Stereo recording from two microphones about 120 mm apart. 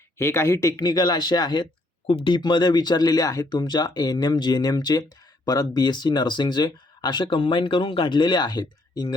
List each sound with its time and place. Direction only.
0.2 s speech: 25° left (ahead or behind)